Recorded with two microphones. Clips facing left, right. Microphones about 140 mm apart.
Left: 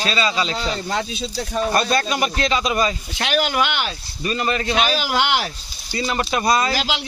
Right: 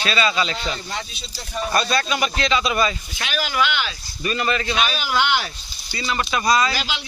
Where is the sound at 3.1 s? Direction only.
65° left (ahead or behind); by 3.9 s 50° left (ahead or behind).